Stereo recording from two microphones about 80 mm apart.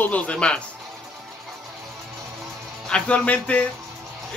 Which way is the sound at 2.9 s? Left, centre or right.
Centre.